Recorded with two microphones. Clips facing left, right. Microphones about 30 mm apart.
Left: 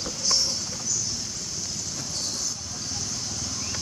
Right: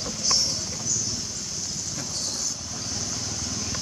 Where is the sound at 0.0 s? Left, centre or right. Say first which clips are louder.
Even; centre.